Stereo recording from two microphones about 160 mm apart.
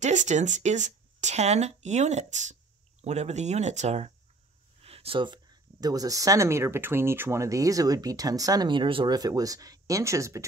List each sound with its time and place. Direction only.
0.0 s speech: 50° right (ahead or behind); by 10.4 s 20° right (ahead or behind)